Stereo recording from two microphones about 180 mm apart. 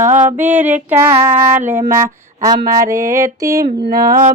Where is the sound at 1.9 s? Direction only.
15° right (ahead or behind).